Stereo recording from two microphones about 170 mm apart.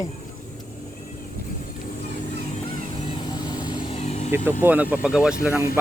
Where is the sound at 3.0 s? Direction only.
30° left (ahead or behind).